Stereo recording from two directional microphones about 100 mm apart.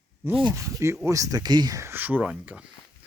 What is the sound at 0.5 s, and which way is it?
Speech, 30° right (ahead or behind).